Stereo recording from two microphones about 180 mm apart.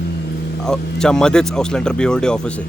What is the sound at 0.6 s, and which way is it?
Speech, 5° left (ahead or behind).